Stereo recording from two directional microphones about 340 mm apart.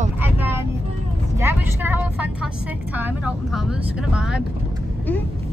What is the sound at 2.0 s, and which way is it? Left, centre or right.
Speech, left.